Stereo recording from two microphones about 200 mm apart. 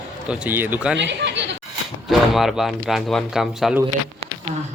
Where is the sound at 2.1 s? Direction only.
Centre (ahead or behind).